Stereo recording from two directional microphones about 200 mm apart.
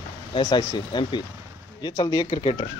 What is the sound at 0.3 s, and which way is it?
Speech, 25° left (ahead or behind).